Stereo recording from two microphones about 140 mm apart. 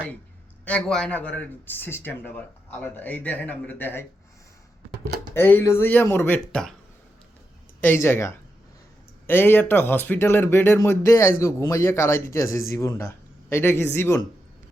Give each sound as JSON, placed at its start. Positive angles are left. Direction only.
{"t": 0.6, "sound": "speech", "side_deg": 5}
{"t": 5.3, "sound": "speech", "side_deg": 15}
{"t": 6.5, "sound": "speech", "side_deg": 5}
{"t": 7.8, "sound": "speech", "side_deg": 15}